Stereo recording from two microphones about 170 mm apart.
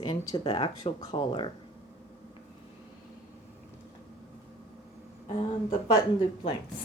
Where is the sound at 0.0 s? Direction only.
25° left (ahead or behind).